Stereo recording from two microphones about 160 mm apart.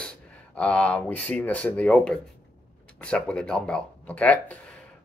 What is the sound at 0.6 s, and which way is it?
Speech, 10° left (ahead or behind).